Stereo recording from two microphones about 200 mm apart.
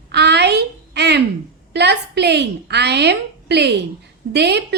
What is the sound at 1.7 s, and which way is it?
A woman's voice, 55° right (ahead or behind).